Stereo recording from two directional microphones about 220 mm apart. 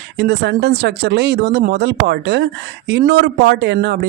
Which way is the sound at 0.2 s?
50° right (ahead or behind).